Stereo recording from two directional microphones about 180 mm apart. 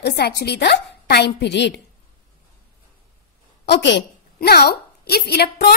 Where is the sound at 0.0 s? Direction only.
65° left (ahead or behind).